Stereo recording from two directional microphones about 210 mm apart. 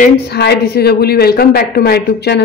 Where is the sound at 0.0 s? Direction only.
50° left (ahead or behind).